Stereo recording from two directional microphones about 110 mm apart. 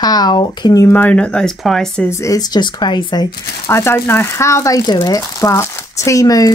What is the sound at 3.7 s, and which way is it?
Speech, 25° left (ahead or behind).